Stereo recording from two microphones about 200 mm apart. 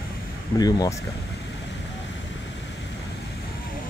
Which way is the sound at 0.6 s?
20° left (ahead or behind).